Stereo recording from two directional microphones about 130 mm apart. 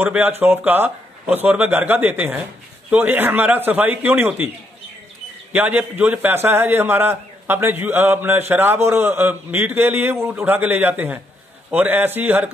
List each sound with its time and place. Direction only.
0.0 s a man's voice: 15° right (ahead or behind)
5.5 s a man's voice: 15° right (ahead or behind)